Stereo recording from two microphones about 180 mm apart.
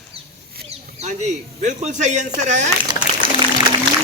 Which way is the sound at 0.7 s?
40° right (ahead or behind).